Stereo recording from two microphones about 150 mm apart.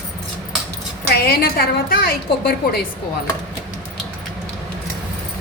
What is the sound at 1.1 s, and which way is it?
A woman's voice, 85° left.